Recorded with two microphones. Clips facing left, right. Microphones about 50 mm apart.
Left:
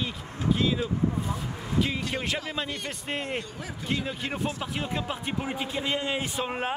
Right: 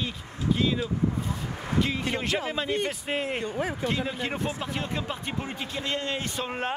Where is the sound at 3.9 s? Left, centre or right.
Centre.